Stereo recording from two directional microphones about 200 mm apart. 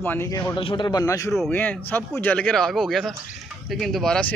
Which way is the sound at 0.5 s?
25° left (ahead or behind).